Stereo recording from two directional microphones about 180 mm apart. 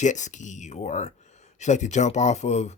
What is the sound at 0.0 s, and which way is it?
Speech, 40° left (ahead or behind).